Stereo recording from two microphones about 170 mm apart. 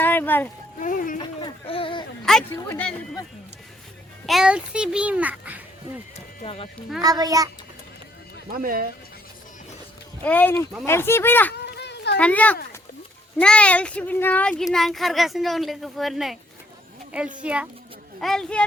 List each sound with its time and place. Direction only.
0.0 s a sound: 10° left (ahead or behind)
0.8 s speech: 50° left (ahead or behind)
1.2 s speech: 25° left (ahead or behind)
2.2 s speech: 5° left (ahead or behind)
4.3 s a child's voice: 5° right (ahead or behind)
6.4 s speech: 35° left (ahead or behind)
7.0 s a child's voice: 20° right (ahead or behind)
8.6 s speech: 55° right (ahead or behind)
10.2 s speech: 10° left (ahead or behind)
11.8 s a sound: 80° left
12.1 s a child's voice: 10° left (ahead or behind); by 17.7 s 5° right (ahead or behind)
18.2 s speech: 5° left (ahead or behind)